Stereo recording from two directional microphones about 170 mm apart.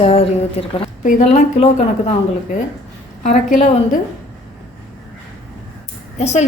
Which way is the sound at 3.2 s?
45° left (ahead or behind).